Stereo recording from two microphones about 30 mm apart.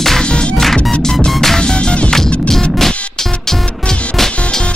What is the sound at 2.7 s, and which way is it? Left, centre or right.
Music, centre.